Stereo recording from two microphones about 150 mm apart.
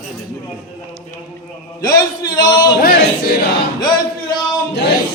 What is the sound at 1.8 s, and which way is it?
Speech, 25° left (ahead or behind).